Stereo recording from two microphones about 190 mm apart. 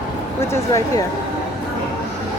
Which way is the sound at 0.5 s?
20° left (ahead or behind).